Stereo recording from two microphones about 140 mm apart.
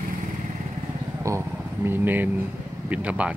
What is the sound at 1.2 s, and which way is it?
Speech, 20° right (ahead or behind).